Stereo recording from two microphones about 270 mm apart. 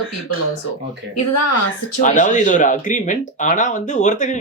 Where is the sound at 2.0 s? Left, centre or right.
Left.